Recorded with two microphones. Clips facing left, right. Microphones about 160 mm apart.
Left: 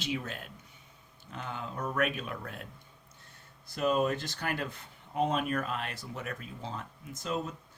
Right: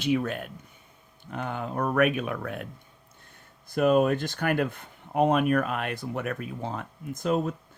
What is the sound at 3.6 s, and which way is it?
Speech, 55° right (ahead or behind).